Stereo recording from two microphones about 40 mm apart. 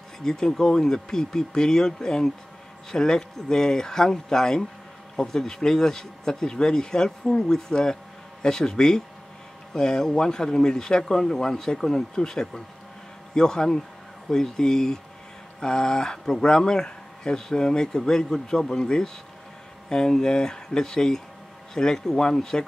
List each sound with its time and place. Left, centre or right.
0.2 s speech: centre